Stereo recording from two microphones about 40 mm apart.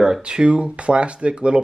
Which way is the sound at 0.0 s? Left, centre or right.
Right.